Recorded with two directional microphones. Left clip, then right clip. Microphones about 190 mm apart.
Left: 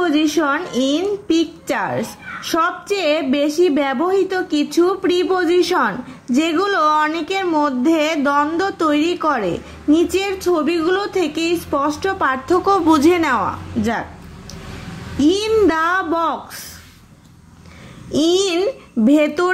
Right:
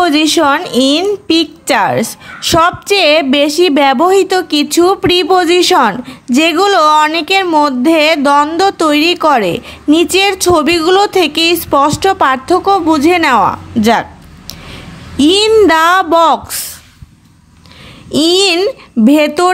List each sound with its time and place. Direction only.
0.0 s a woman's voice: 35° right (ahead or behind)
10.5 s a woman's voice: 40° right (ahead or behind)
12.5 s a sound: 10° right (ahead or behind)
13.2 s a woman's voice: 30° right (ahead or behind)
15.1 s a woman's voice: 35° right (ahead or behind)
18.1 s speech: 20° right (ahead or behind)